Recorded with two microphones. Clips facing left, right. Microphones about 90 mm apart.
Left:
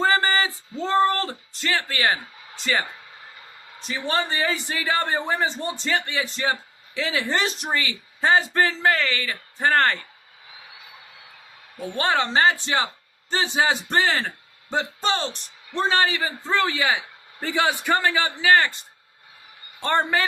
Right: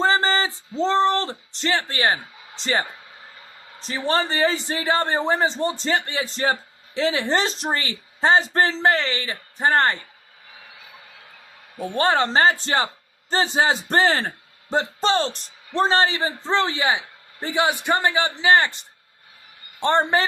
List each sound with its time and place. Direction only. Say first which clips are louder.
0.0 s a sound: right 1 dB; 25° right (ahead or behind)
0.8 s a man's voice: right 1 dB; 25° right (ahead or behind)
11.9 s a man's voice: right 3 dB; 35° right (ahead or behind)